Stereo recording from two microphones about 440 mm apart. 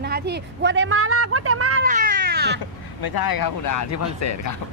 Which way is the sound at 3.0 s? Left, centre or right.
Left.